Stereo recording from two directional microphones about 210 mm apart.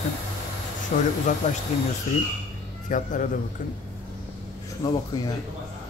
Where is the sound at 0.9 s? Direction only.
40° left (ahead or behind).